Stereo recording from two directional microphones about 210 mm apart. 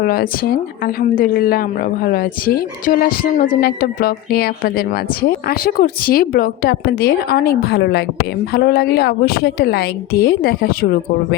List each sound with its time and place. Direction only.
0.0 s a woman's voice: 45° left (ahead or behind)